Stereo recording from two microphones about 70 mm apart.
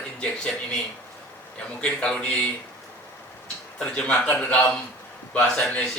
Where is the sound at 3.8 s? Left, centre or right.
Centre.